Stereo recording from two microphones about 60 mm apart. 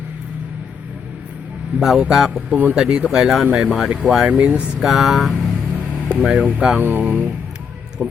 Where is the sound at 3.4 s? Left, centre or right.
Right.